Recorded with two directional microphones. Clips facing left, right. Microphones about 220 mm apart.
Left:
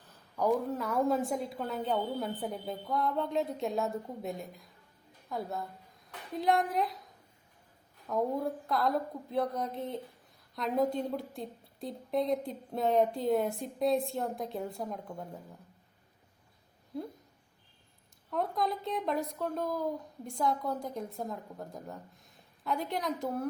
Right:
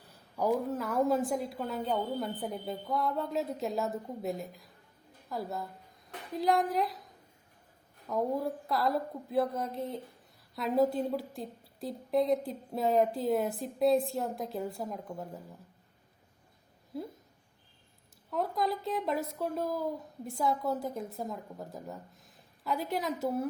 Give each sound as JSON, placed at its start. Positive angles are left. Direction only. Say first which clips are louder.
{"t": 0.1, "sound": "a woman's voice", "louder": "left 1 dB", "side_deg": -10}
{"t": 8.0, "sound": "a woman's voice", "louder": "even", "side_deg": 0}
{"t": 16.9, "sound": "speech", "louder": "even", "side_deg": -5}
{"t": 18.3, "sound": "a woman's voice", "louder": "right 1 dB", "side_deg": 0}